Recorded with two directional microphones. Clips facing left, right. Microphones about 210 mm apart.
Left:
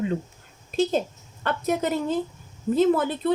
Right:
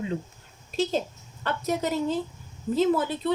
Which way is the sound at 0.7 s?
55° left (ahead or behind).